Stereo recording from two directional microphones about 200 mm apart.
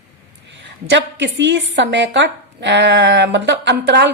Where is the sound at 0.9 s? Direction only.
60° right (ahead or behind).